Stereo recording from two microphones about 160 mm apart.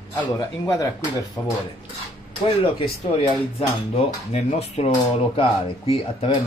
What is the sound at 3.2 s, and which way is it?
Speech, 40° left (ahead or behind).